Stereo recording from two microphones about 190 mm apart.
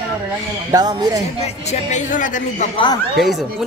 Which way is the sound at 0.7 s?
20° right (ahead or behind).